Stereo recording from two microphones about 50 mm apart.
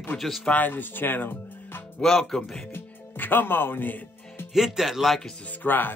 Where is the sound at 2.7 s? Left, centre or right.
Left.